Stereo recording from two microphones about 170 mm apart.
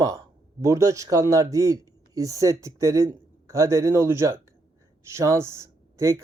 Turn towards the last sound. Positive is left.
turn(degrees=-15)  # may be behind; listen again after turning